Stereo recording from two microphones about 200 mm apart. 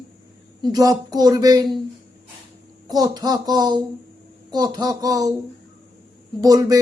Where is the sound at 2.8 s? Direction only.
20° right (ahead or behind).